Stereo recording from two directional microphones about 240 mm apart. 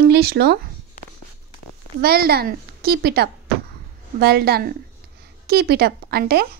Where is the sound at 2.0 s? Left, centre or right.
Right.